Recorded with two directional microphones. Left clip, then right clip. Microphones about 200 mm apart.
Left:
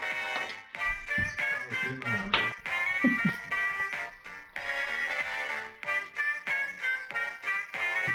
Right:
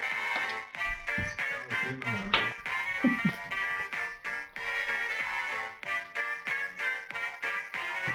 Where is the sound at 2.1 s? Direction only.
Centre (ahead or behind).